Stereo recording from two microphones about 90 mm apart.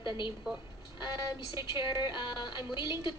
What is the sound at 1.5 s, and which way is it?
A woman's voice, 55° left (ahead or behind).